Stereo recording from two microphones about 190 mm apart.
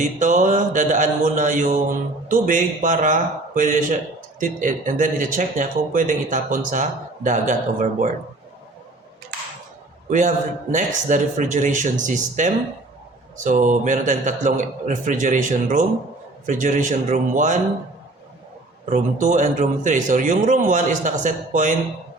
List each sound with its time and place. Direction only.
0.0 s mantra: 40° right (ahead or behind)
4.4 s speech: 45° right (ahead or behind)
7.3 s mantra: 40° right (ahead or behind)
10.1 s mantra: 40° right (ahead or behind)
18.9 s mantra: 40° right (ahead or behind)